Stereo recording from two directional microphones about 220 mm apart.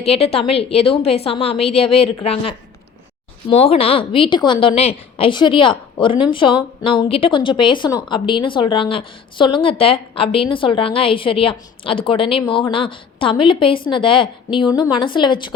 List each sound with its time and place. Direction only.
0.0 s a woman's voice: 25° left (ahead or behind)